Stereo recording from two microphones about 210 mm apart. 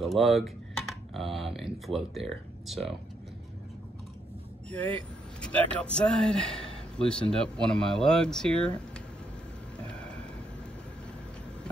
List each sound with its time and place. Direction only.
0.0 s speech: centre (ahead or behind)
4.6 s speech: 5° left (ahead or behind)
5.5 s a man's voice: 25° right (ahead or behind)
5.9 s speech: 5° left (ahead or behind)
9.8 s vehicle: 5° left (ahead or behind)